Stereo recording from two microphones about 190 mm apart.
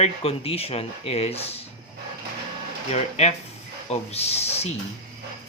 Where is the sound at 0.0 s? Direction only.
30° left (ahead or behind).